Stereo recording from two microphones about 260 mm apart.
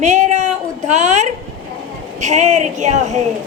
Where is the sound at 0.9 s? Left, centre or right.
Right.